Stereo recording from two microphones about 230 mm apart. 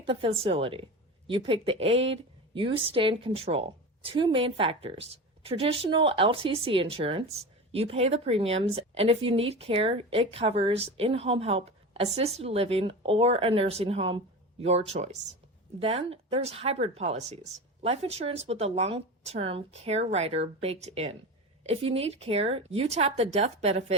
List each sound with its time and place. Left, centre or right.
0.0 s a woman's voice: right